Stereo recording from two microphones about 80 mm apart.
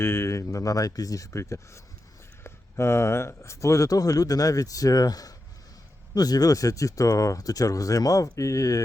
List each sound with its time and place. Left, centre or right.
0.0 s speech: left